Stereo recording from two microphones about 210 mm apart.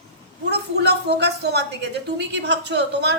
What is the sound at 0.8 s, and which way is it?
A woman's voice, 50° right (ahead or behind).